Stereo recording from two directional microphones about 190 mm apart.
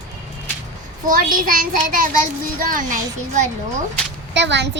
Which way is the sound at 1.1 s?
45° right (ahead or behind).